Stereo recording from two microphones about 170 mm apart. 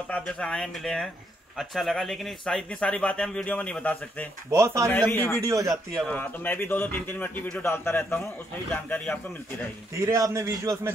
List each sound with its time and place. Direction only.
0.1 s speech: 5° left (ahead or behind)
4.5 s speech: 15° right (ahead or behind)
4.8 s speech: 10° left (ahead or behind)
5.4 s a man's voice: 20° right (ahead or behind)
5.9 s speech: 10° left (ahead or behind)
9.9 s a man's voice: 20° right (ahead or behind)